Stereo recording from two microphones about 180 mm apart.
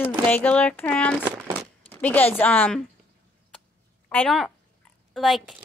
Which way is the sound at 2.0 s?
10° left (ahead or behind).